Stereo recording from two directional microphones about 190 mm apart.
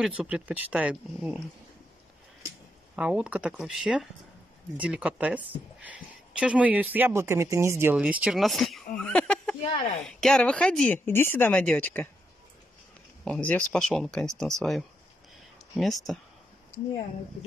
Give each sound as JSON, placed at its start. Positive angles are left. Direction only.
{"t": 0.0, "sound": "a woman's voice", "side_deg": -5}
{"t": 3.0, "sound": "a woman's voice", "side_deg": -5}
{"t": 9.6, "sound": "speech", "side_deg": 35}
{"t": 10.0, "sound": "speech", "side_deg": 5}
{"t": 13.2, "sound": "speech", "side_deg": 5}